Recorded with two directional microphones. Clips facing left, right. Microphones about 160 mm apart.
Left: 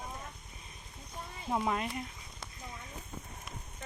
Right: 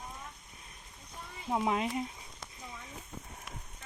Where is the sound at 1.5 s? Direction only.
10° right (ahead or behind).